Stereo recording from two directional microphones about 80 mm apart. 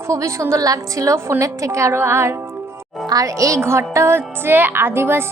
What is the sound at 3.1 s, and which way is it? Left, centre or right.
A woman's voice, right.